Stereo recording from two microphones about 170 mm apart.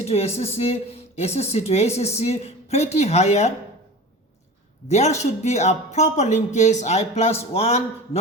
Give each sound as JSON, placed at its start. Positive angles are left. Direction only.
{"t": 0.0, "sound": "speech", "side_deg": 40}
{"t": 4.9, "sound": "speech", "side_deg": 40}